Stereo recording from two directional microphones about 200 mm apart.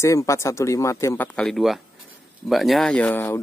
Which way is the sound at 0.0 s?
15° left (ahead or behind).